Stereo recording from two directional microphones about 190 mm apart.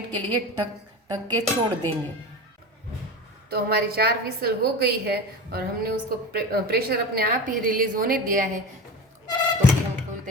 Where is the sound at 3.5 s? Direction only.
55° right (ahead or behind).